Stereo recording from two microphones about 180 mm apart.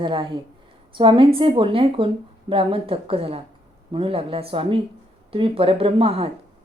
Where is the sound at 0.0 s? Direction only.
25° right (ahead or behind).